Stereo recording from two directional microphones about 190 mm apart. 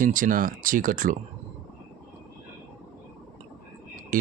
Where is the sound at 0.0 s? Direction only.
45° right (ahead or behind).